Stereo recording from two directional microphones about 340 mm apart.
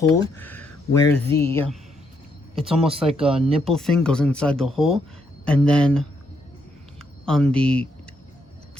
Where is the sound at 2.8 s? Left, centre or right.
Centre.